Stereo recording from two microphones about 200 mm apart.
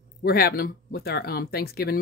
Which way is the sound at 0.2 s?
50° left (ahead or behind).